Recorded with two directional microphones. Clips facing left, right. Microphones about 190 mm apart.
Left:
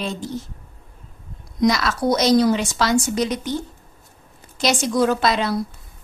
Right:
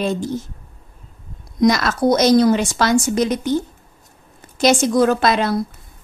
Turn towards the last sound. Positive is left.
turn(degrees=-50)  # may be behind; listen again after turning